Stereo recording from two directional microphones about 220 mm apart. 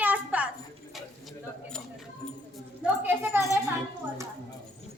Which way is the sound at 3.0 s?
10° right (ahead or behind).